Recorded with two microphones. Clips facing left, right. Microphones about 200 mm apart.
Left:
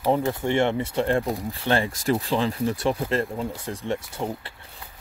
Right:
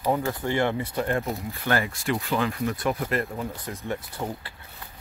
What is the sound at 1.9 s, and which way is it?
Speech, 40° left (ahead or behind).